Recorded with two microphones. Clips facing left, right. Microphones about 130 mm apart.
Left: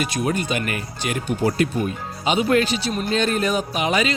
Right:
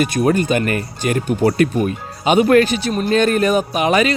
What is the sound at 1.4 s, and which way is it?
Speech, 65° right (ahead or behind).